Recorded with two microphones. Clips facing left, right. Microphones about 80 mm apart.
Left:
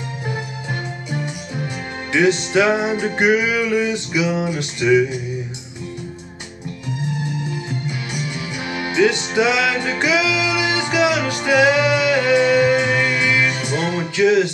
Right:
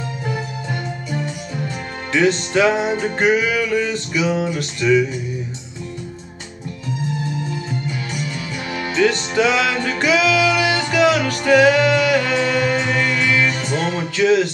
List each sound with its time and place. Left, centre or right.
2.1 s music: centre
8.7 s music: centre